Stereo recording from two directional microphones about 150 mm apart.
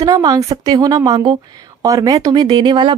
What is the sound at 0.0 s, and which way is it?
A woman's voice, 25° right (ahead or behind).